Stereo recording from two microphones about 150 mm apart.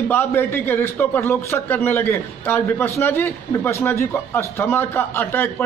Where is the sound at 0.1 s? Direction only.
15° left (ahead or behind).